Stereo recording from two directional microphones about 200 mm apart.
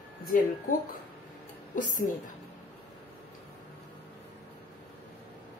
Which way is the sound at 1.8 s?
40° left (ahead or behind).